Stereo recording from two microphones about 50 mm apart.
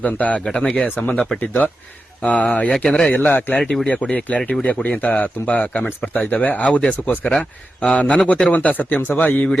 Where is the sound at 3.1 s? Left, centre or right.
Left.